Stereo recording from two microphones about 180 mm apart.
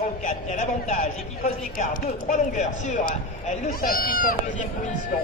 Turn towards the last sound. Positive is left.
turn(degrees=50)  # may be behind; listen again after turning